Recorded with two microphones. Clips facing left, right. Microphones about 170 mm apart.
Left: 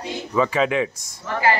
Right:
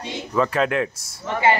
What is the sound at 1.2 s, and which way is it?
Speech, 20° right (ahead or behind).